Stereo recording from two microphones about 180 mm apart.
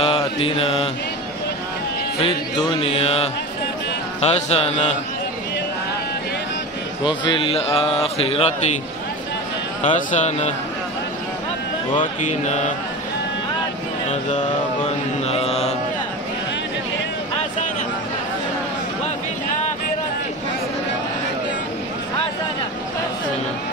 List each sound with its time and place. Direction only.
0.0 s mantra: 30° left (ahead or behind)
2.7 s speech: 30° left (ahead or behind)
7.1 s speech: 25° left (ahead or behind)
9.8 s speech: 40° left (ahead or behind)
12.0 s mantra: 40° left (ahead or behind)
14.3 s mantra: 40° left (ahead or behind)